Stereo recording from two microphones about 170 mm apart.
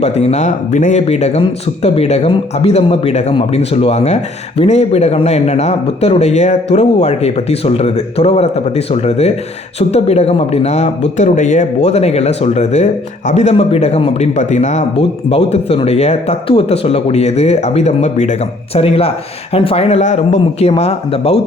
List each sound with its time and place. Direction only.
0.0 s speech: 40° left (ahead or behind)